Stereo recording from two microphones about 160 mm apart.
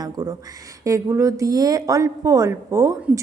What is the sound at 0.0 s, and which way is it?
A woman's voice, 20° right (ahead or behind).